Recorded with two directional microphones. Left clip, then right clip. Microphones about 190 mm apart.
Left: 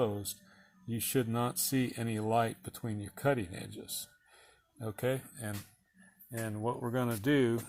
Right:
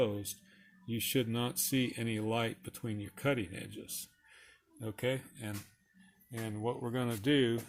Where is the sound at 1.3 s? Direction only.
25° left (ahead or behind).